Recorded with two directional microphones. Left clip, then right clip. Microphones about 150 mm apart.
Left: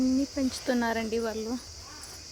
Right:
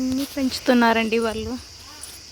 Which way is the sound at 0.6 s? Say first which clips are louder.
Right 13 dB; 40° right (ahead or behind).